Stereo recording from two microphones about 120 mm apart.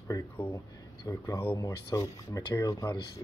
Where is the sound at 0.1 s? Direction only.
30° left (ahead or behind).